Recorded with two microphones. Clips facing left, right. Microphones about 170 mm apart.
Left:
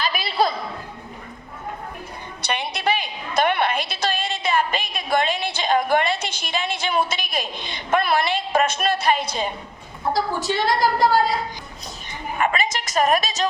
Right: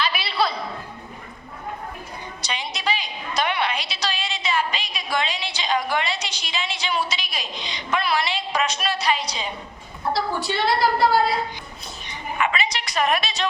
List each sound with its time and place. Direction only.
0.0 s a sound: 45° left (ahead or behind)
2.4 s a woman's voice: 55° left (ahead or behind)
12.4 s a woman's voice: 45° left (ahead or behind)